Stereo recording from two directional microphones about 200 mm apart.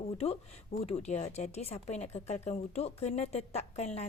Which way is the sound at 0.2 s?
30° left (ahead or behind).